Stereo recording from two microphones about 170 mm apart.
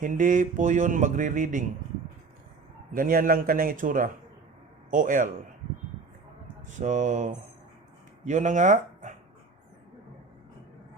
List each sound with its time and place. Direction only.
0.0 s speech: 50° right (ahead or behind)
2.9 s a man's voice: 55° right (ahead or behind)
6.7 s speech: 45° right (ahead or behind)